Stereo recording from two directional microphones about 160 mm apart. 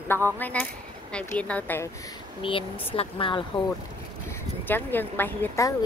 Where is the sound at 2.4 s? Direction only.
35° left (ahead or behind).